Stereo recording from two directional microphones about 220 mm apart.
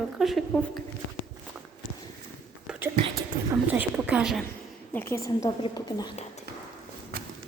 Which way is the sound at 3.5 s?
10° right (ahead or behind).